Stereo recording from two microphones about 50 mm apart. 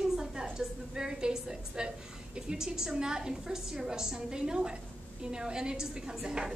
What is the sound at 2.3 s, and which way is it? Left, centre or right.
A woman's voice, centre.